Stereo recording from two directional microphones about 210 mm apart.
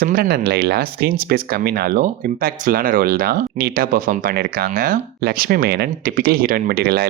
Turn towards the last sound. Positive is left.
turn(degrees=-45)  # may be behind; listen again after turning